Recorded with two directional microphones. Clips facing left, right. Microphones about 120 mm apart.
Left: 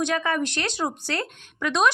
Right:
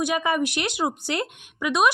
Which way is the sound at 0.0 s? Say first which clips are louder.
Right 1 dB; 15° right (ahead or behind).